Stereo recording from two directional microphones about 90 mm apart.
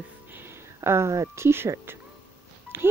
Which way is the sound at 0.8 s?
30° right (ahead or behind).